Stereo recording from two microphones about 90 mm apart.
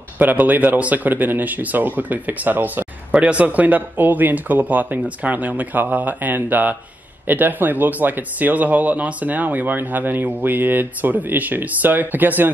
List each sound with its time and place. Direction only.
0.2 s speech: 20° right (ahead or behind)